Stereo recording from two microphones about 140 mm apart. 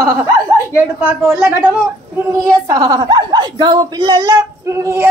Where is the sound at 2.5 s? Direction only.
25° right (ahead or behind).